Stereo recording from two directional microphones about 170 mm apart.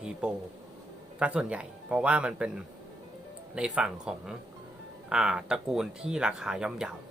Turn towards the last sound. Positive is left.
turn(degrees=-5)  # may be behind; listen again after turning